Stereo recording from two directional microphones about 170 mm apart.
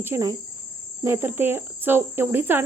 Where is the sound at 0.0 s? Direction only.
15° right (ahead or behind).